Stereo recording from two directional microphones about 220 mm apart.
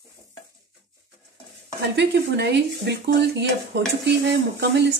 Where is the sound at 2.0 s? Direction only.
50° right (ahead or behind).